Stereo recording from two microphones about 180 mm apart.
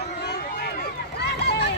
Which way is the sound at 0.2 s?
65° left (ahead or behind).